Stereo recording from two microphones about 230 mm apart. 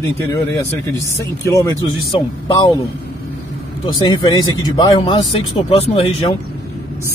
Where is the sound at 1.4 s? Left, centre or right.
Centre.